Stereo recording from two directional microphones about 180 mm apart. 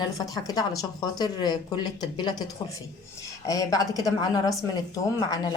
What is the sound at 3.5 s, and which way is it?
Speech, 20° left (ahead or behind).